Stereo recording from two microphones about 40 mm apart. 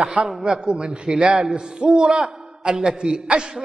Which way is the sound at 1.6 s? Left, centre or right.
Centre.